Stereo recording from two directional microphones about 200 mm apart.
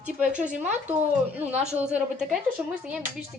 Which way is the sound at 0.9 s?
10° right (ahead or behind).